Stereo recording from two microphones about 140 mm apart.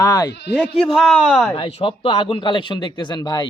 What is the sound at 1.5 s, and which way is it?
Speech, 40° left (ahead or behind).